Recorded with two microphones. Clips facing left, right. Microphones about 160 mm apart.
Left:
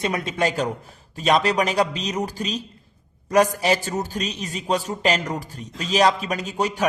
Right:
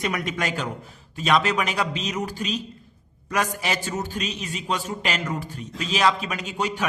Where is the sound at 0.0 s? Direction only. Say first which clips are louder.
Left 4 dB; 30° left (ahead or behind).